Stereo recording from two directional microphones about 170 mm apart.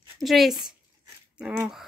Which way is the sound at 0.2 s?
Centre (ahead or behind).